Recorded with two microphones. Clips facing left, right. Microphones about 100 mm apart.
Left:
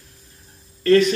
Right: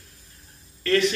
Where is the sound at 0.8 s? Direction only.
30° left (ahead or behind).